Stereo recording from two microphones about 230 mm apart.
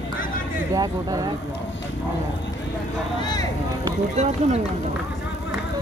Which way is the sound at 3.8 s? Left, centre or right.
Right.